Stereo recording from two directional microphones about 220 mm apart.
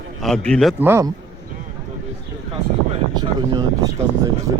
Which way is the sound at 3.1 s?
20° right (ahead or behind).